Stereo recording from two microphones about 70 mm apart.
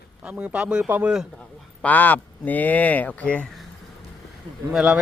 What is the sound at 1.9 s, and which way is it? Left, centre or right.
Speech, left.